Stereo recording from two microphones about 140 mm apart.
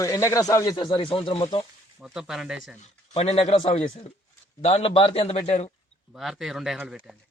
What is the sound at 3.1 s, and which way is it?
A man's voice, 50° left (ahead or behind).